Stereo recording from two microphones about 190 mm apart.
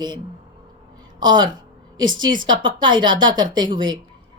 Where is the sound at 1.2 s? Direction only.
25° right (ahead or behind).